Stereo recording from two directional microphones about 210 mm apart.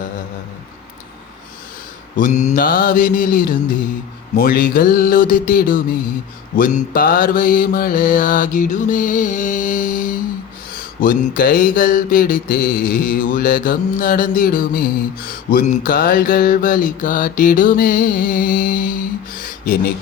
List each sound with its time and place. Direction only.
2.1 s mantra: 35° left (ahead or behind)